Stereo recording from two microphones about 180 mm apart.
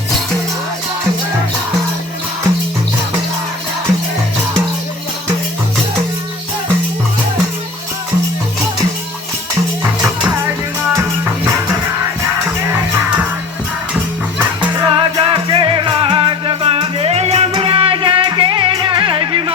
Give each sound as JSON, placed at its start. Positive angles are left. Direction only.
{"t": 14.3, "sound": "music", "side_deg": -10}
{"t": 14.8, "sound": "music", "side_deg": -25}